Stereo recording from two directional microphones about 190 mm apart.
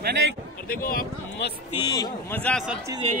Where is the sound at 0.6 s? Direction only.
50° left (ahead or behind).